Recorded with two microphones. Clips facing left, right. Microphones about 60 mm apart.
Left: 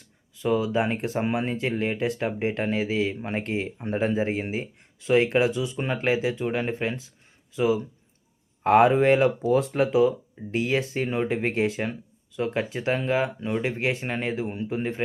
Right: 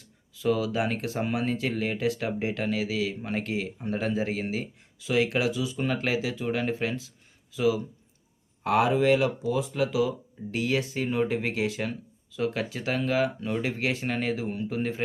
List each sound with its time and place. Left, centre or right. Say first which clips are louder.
0.4 s speech: left 2 dB; left
5.7 s speech: left 2 dB; left
9.6 s speech: left 4 dB; left; by 15.0 s centre